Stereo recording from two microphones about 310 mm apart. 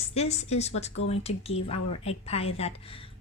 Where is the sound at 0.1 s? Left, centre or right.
Left.